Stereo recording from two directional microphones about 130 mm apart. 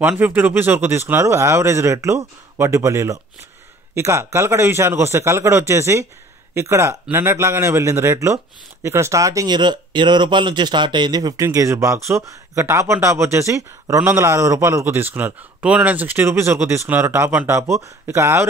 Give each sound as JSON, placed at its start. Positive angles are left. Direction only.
{"t": 0.0, "sound": "speech", "side_deg": -15}